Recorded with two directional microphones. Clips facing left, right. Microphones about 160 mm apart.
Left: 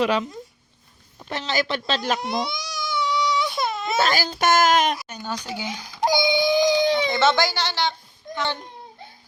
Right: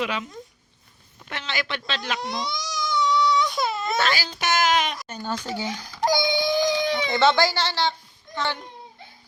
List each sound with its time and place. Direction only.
0.0 s speech: 35° left (ahead or behind); by 2.6 s 55° left (ahead or behind)
2.8 s baby cry: 10° left (ahead or behind)
4.0 s a child's voice: 45° left (ahead or behind)
4.9 s speech: 10° left (ahead or behind)
6.1 s a sound: 5° left (ahead or behind)
6.8 s baby cry: 30° left (ahead or behind)
7.3 s speech: 20° left (ahead or behind)